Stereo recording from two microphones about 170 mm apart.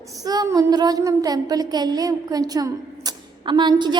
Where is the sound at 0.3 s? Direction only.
20° right (ahead or behind).